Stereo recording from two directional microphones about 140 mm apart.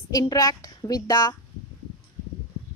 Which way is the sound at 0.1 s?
25° left (ahead or behind).